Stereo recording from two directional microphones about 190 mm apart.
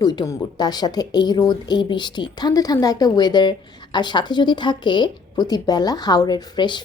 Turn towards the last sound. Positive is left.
turn(degrees=25)  # may be behind; listen again after turning